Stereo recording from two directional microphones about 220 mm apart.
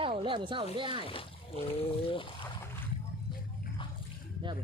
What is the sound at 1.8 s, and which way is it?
Speech, 25° left (ahead or behind).